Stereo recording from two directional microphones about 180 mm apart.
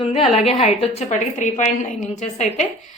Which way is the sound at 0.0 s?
30° left (ahead or behind).